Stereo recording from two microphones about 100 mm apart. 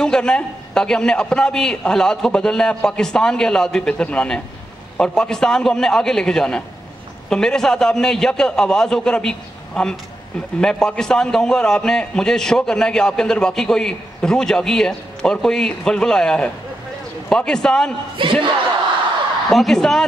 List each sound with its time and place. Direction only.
0.0 s a man's voice: 10° left (ahead or behind)
18.1 s speech: 55° right (ahead or behind)
19.5 s a woman's voice: 5° left (ahead or behind)